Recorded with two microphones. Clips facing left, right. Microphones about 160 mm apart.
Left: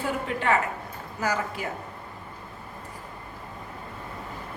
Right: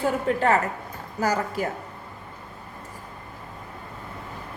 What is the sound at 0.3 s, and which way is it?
Speech, 40° right (ahead or behind).